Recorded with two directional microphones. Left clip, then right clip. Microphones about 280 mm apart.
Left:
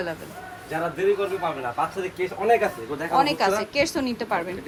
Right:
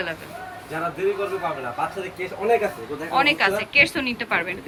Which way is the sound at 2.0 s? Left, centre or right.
Centre.